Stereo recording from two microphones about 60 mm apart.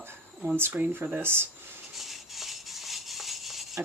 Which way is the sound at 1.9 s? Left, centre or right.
Centre.